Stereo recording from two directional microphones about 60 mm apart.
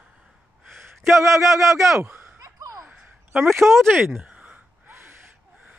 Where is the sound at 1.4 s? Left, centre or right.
Centre.